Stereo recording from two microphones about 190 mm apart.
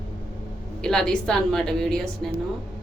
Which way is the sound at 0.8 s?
5° left (ahead or behind).